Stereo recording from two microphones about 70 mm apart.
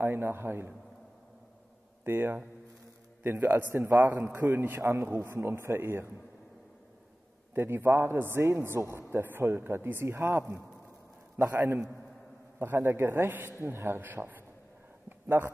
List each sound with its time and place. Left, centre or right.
0.0 s a man's voice: right
2.0 s a man's voice: right
7.5 s a man's voice: right
15.0 s a sound: right